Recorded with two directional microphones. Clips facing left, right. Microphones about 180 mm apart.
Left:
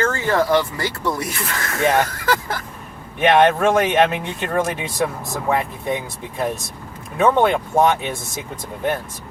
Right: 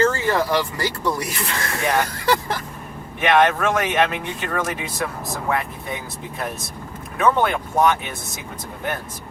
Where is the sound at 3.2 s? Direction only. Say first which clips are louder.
Left 3 dB; 25° left (ahead or behind).